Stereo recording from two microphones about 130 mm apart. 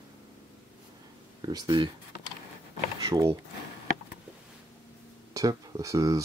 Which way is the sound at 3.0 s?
30° right (ahead or behind).